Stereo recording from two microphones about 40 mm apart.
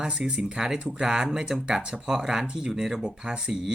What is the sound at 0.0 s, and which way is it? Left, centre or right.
Speech, right.